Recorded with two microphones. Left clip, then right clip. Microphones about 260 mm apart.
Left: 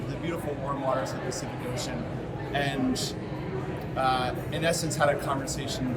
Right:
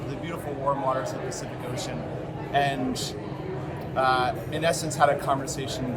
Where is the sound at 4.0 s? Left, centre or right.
Centre.